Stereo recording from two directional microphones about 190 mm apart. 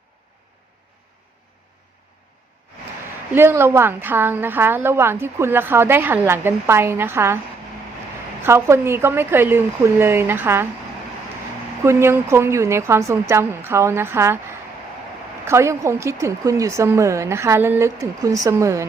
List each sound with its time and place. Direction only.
3.3 s a woman's voice: 10° right (ahead or behind)
8.4 s a woman's voice: 15° right (ahead or behind)
11.8 s a woman's voice: 15° right (ahead or behind)
15.4 s a woman's voice: 15° right (ahead or behind)